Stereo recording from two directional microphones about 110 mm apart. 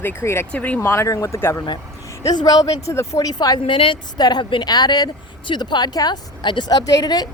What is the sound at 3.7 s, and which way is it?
Speech, 50° left (ahead or behind).